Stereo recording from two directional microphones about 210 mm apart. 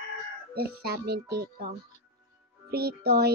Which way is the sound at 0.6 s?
50° right (ahead or behind).